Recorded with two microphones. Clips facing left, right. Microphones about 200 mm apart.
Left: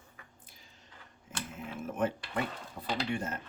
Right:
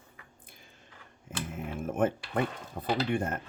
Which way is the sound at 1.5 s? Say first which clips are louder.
Right 4 dB; 50° right (ahead or behind).